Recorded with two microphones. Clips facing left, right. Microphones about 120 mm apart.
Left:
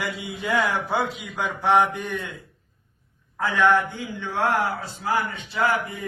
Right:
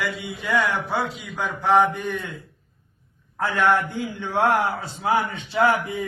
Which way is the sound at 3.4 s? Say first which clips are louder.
Even; centre (ahead or behind).